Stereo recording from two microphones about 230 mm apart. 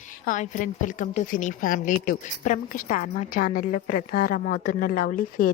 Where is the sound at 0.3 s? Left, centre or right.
Left.